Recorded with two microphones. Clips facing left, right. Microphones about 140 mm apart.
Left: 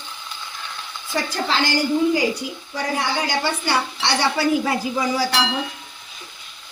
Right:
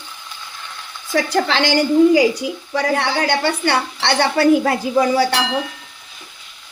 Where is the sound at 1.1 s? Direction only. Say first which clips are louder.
Right 6 dB; 80° right; by 5.2 s 60° right (ahead or behind).